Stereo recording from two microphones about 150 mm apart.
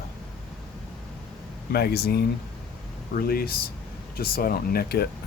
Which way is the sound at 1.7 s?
90° left.